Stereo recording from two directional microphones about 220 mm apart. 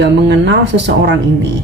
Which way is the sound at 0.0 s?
50° right (ahead or behind).